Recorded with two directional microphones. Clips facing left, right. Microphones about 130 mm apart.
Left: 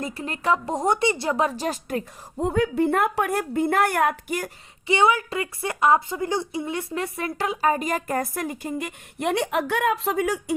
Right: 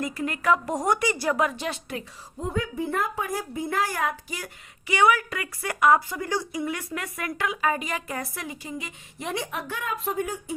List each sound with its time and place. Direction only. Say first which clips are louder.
0.0 s a woman's voice: right 1 dB; 30° left (ahead or behind)
2.4 s a woman's voice: left 7 dB; 65° left (ahead or behind)
4.9 s a woman's voice: left 1 dB; 25° left (ahead or behind); by 10.4 s 90° left